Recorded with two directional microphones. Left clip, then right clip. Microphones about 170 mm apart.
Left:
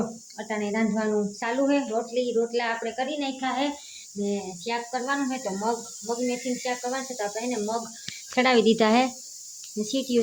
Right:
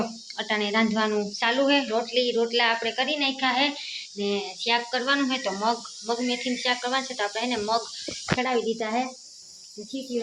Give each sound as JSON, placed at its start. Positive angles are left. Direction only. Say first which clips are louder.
{"t": 0.3, "sound": "speech", "louder": "right 4 dB", "side_deg": 0}
{"t": 8.4, "sound": "speech", "louder": "left 8 dB", "side_deg": 85}